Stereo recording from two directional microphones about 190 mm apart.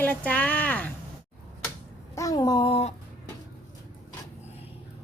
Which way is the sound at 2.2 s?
20° left (ahead or behind).